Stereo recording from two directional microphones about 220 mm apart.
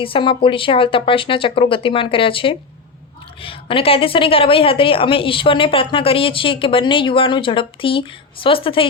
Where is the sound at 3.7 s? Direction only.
25° left (ahead or behind).